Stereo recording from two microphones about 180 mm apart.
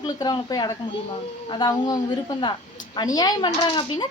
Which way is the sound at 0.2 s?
20° left (ahead or behind).